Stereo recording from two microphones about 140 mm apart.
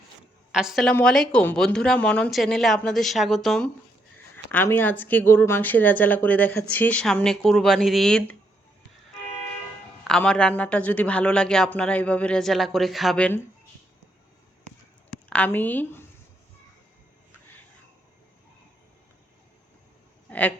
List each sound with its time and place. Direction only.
0.5 s speech: 5° right (ahead or behind)
4.5 s speech: 15° left (ahead or behind)
10.0 s speech: 5° left (ahead or behind)
15.3 s a woman's voice: 10° left (ahead or behind)